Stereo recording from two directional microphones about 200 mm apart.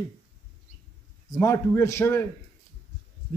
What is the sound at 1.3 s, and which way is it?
Speech, 15° left (ahead or behind).